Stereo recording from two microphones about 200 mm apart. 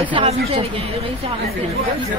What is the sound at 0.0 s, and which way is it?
Speech, 30° right (ahead or behind).